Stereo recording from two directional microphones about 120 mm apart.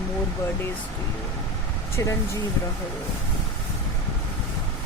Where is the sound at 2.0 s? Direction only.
25° left (ahead or behind).